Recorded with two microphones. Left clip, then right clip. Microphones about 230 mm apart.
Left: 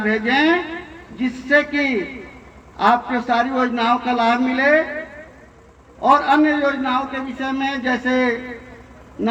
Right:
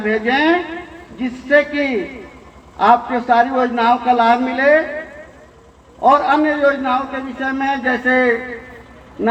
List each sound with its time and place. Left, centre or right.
0.0 s a man's voice: left
6.0 s a man's voice: left